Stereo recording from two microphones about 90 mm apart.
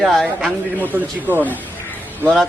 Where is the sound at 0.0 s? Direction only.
Centre (ahead or behind).